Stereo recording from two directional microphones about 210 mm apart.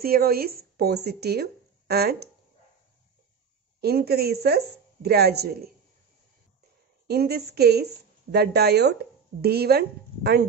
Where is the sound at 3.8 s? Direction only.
50° right (ahead or behind).